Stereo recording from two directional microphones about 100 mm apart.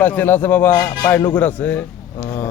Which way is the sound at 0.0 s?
20° left (ahead or behind).